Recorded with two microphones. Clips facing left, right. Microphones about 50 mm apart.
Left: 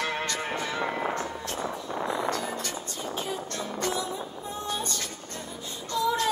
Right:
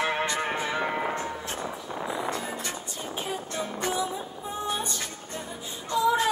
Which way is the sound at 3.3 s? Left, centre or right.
Centre.